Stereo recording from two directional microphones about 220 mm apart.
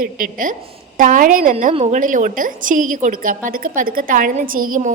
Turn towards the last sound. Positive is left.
turn(degrees=-40)  # may be behind; listen again after turning